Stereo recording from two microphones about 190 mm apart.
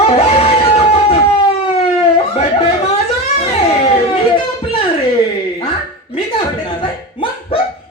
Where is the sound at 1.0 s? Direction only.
30° left (ahead or behind).